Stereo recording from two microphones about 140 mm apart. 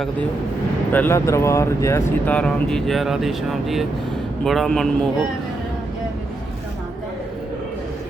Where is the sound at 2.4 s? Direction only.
5° left (ahead or behind).